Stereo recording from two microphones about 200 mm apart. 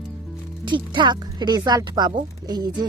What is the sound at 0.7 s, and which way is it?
Speech, 25° right (ahead or behind).